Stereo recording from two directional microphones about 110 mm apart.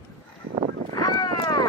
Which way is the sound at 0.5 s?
90° right.